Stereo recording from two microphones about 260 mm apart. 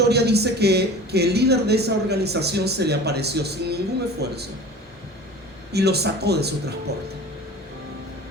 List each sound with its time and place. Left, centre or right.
0.0 s a man's voice: right
5.7 s a man's voice: right